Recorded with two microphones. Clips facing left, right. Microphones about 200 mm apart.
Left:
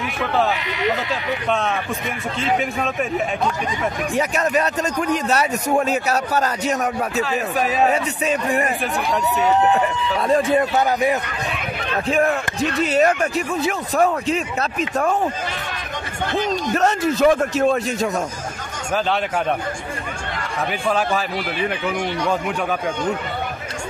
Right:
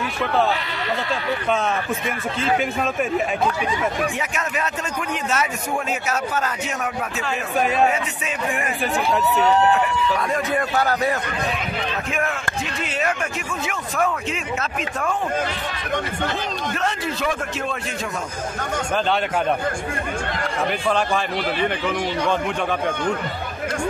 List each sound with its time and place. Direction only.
2.4 s speech: centre (ahead or behind)
4.2 s speech: 35° left (ahead or behind)
7.2 s speech: centre (ahead or behind)
7.9 s speech: 40° left (ahead or behind)
9.4 s speech: 20° left (ahead or behind)
12.1 s speech: 35° left (ahead or behind)
16.7 s a man's voice: 45° left (ahead or behind)